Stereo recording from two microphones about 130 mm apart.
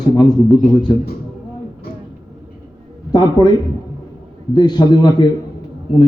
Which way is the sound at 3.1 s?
30° left (ahead or behind).